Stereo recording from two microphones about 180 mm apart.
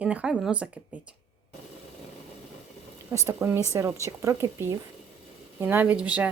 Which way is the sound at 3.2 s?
15° right (ahead or behind).